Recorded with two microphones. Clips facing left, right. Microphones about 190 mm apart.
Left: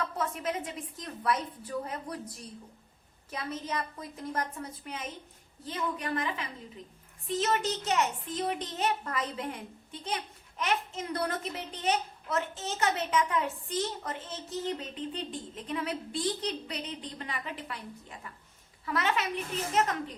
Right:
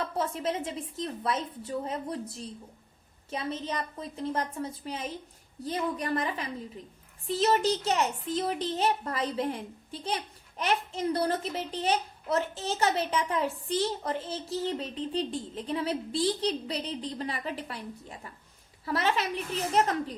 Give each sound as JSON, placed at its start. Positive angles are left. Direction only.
{"t": 0.0, "sound": "a woman's voice", "side_deg": -30}
{"t": 18.9, "sound": "a woman's voice", "side_deg": -35}